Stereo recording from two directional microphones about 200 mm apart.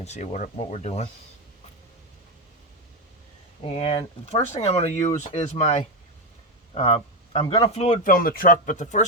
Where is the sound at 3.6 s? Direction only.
30° left (ahead or behind).